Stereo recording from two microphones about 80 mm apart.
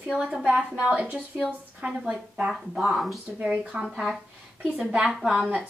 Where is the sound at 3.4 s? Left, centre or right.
Centre.